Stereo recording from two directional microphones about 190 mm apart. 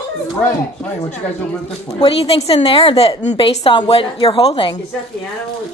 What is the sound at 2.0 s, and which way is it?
A woman's voice, 30° left (ahead or behind).